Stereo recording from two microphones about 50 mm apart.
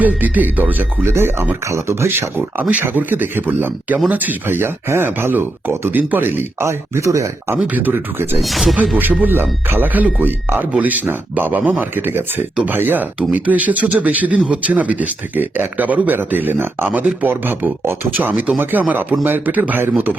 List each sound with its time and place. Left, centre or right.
0.0 s speech: right
1.0 s speech: right
2.8 s speech: right
6.2 s speech: right
6.7 s speech: right
7.7 s speech: right
7.9 s speech: right
8.4 s speech: centre
9.0 s speech: right
10.7 s speech: right
13.1 s speech: right